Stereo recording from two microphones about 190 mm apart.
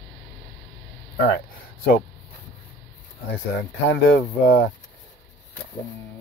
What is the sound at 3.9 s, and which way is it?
Speech, 65° left (ahead or behind).